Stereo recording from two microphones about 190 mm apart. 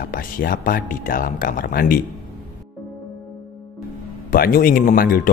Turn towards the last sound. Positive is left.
turn(degrees=50)  # may be behind; listen again after turning